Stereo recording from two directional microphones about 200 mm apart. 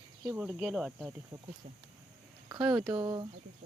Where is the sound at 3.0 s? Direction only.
25° right (ahead or behind).